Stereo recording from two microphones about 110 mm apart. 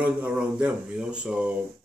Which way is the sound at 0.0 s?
10° right (ahead or behind).